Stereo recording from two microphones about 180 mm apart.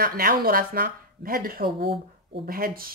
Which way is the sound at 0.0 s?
55° right (ahead or behind).